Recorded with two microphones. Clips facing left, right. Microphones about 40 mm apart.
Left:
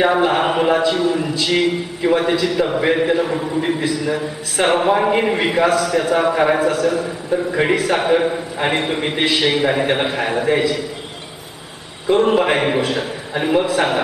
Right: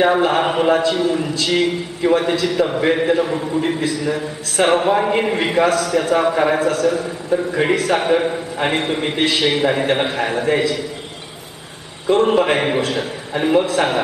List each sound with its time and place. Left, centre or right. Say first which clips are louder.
0.0 s a sound: even; centre
0.9 s a man's voice: even; centre
12.1 s a man's voice: even; centre